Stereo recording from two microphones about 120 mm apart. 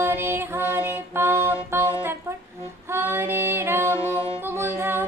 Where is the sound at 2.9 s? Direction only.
20° right (ahead or behind).